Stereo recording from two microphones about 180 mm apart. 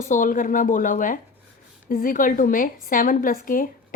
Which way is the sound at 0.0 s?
45° left (ahead or behind).